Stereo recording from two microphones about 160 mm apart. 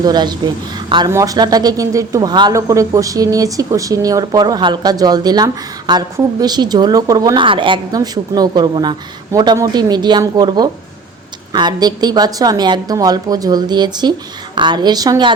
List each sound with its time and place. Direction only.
0.0 s speech: 25° right (ahead or behind)